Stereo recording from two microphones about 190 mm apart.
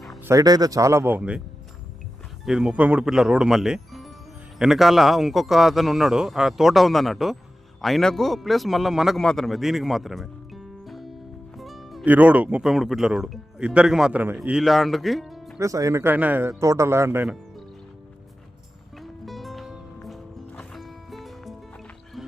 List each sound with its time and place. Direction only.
0.3 s a man's voice: 20° right (ahead or behind)
2.4 s a man's voice: 5° right (ahead or behind)
15.5 s a man's voice: 15° right (ahead or behind)
18.9 s music: centre (ahead or behind)